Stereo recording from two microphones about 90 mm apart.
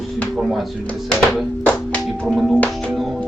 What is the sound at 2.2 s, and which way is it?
Speech, centre (ahead or behind).